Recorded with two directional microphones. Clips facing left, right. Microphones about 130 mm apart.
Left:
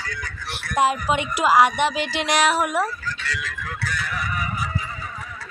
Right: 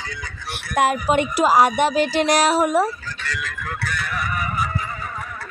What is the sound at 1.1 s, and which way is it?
Speech, 45° right (ahead or behind).